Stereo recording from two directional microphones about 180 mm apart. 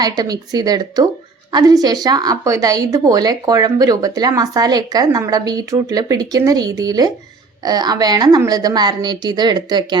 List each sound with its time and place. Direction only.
0.0 s a woman's voice: 20° right (ahead or behind)